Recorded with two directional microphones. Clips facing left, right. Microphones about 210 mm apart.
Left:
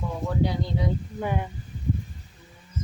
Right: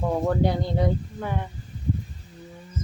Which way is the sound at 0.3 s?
55° right (ahead or behind).